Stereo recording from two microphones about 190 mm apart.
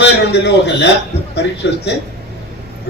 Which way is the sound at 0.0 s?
65° left (ahead or behind).